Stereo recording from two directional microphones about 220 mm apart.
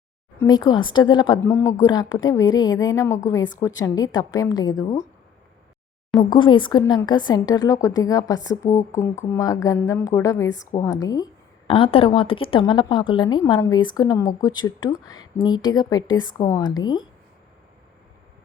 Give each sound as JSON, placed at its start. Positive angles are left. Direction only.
{"t": 0.3, "sound": "a woman's voice", "side_deg": 15}
{"t": 6.1, "sound": "a woman's voice", "side_deg": 20}